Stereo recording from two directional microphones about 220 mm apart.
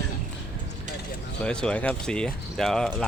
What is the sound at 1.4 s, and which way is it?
Speech, 5° left (ahead or behind).